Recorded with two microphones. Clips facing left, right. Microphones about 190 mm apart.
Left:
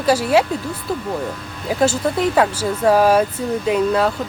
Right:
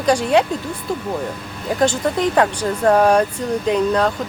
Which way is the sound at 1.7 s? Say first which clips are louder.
Even; 5° left (ahead or behind).